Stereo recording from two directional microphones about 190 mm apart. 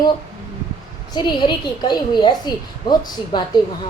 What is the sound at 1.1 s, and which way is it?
A woman's voice, 25° left (ahead or behind).